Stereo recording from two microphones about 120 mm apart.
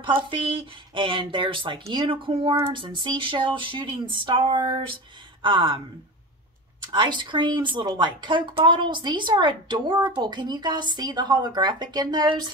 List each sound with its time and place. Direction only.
0.0 s speech: 45° right (ahead or behind)
6.9 s a woman's voice: 40° right (ahead or behind)